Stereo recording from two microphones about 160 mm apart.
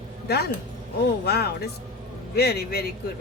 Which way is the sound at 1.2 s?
80° left.